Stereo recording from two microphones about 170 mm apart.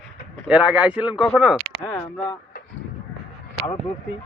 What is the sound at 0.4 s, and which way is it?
Speech, 5° right (ahead or behind).